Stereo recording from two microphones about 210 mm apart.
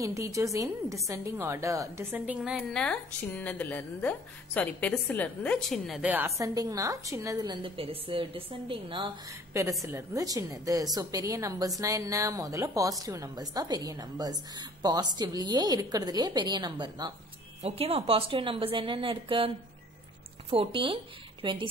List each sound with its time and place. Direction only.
0.0 s a woman's voice: 15° right (ahead or behind)
2.8 s a woman's voice: 5° left (ahead or behind); by 21.6 s 25° right (ahead or behind)